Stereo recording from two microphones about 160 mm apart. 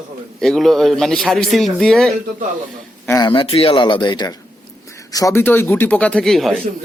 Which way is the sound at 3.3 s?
35° left (ahead or behind).